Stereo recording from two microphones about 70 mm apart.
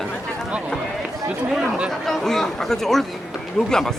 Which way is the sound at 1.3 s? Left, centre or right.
Centre.